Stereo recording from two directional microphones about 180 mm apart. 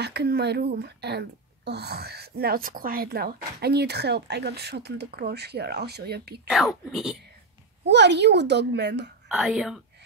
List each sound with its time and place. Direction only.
0.0 s a woman's voice: 65° right (ahead or behind)
6.5 s speech: centre (ahead or behind)
7.8 s a child's voice: 70° right (ahead or behind)
9.3 s speech: 5° right (ahead or behind)